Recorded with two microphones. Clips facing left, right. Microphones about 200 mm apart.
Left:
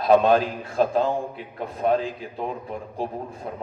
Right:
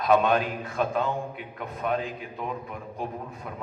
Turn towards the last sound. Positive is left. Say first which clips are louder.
# left 4 dB
turn(degrees=30)  # may be behind; listen again after turning